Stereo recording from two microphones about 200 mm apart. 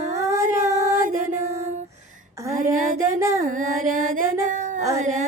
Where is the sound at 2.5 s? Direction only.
40° right (ahead or behind).